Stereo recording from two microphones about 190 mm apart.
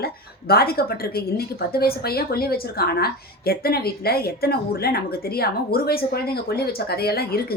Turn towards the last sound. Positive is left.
turn(degrees=55)  # may be behind; listen again after turning